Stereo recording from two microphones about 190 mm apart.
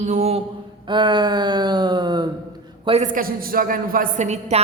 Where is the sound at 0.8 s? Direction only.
25° right (ahead or behind).